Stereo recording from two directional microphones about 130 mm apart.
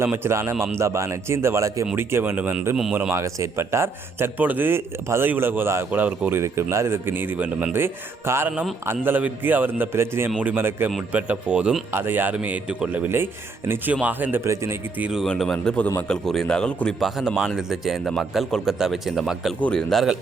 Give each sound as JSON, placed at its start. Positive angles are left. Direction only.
{"t": 0.0, "sound": "a man's voice", "side_deg": -20}
{"t": 15.2, "sound": "a man's voice", "side_deg": 5}